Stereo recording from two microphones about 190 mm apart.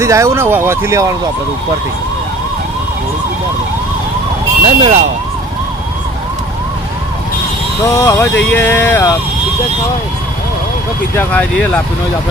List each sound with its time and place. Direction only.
0.0 s speech: 15° right (ahead or behind)
4.6 s speech: 35° right (ahead or behind)
7.9 s speech: 15° left (ahead or behind)
11.2 s speech: 10° left (ahead or behind)